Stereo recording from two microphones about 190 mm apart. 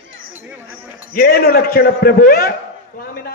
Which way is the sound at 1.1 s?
50° left (ahead or behind).